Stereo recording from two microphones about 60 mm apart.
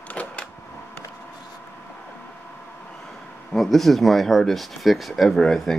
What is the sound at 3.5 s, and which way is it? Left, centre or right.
Speech, centre.